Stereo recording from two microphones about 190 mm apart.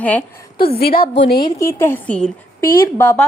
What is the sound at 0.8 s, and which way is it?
Speech, 50° left (ahead or behind).